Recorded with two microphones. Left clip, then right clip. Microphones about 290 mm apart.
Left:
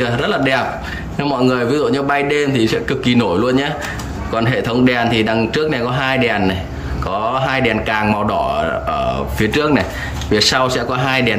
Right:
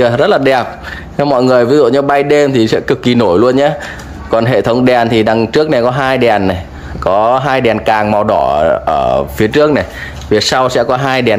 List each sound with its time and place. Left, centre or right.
0.0 s speech: centre